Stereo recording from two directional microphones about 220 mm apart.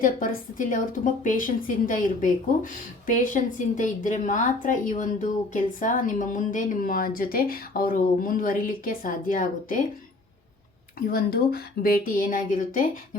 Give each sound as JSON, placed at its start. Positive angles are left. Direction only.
{"t": 0.0, "sound": "a woman's voice", "side_deg": 40}
{"t": 11.0, "sound": "a woman's voice", "side_deg": 45}